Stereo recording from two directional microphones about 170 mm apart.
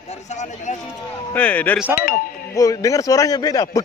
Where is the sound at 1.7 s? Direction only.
10° right (ahead or behind).